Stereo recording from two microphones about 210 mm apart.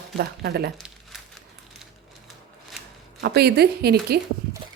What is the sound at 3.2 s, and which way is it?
Speech, 50° right (ahead or behind).